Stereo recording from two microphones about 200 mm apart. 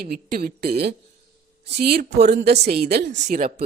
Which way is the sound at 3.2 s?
45° right (ahead or behind).